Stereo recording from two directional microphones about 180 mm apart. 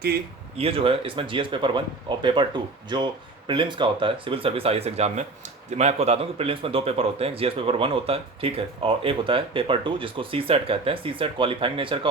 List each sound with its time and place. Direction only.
0.5 s speech: 30° right (ahead or behind)